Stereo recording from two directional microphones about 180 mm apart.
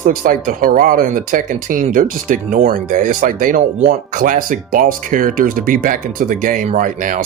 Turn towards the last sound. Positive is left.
turn(degrees=-50)  # may be behind; listen again after turning